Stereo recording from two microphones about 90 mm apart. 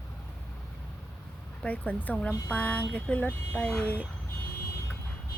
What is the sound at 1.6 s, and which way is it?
Speech, 15° left (ahead or behind).